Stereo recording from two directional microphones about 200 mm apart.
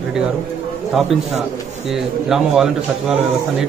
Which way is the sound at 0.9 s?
Centre (ahead or behind).